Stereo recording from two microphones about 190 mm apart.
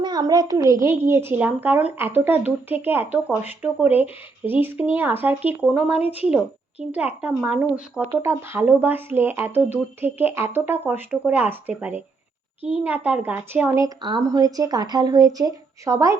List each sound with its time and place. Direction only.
0.0 s a woman's voice: 20° right (ahead or behind)